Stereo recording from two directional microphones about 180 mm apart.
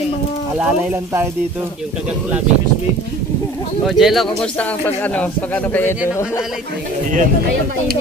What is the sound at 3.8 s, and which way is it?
Speech, centre (ahead or behind).